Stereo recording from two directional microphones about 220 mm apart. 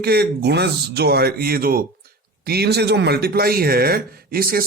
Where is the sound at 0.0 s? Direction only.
45° right (ahead or behind).